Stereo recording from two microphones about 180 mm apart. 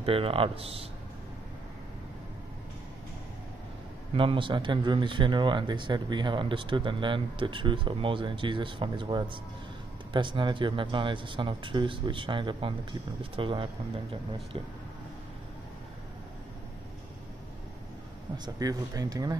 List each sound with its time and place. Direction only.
0.0 s speech: 30° right (ahead or behind)
4.1 s speech: 30° right (ahead or behind)
18.4 s speech: 20° right (ahead or behind)